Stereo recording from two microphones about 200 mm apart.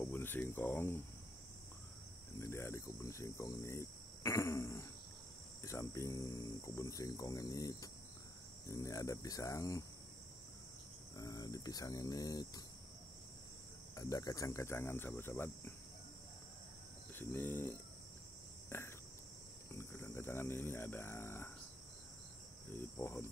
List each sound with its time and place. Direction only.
0.0 s speech: 10° left (ahead or behind)
2.4 s cricket: 15° left (ahead or behind)
11.1 s cricket: 20° left (ahead or behind)
13.9 s cricket: 15° left (ahead or behind)
17.1 s cricket: 10° left (ahead or behind)
19.7 s a sound: 10° left (ahead or behind)
22.7 s cricket: 10° left (ahead or behind)